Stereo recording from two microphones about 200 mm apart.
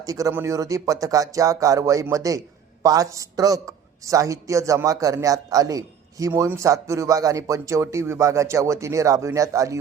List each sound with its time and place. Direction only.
0.0 s a man's voice: 20° right (ahead or behind)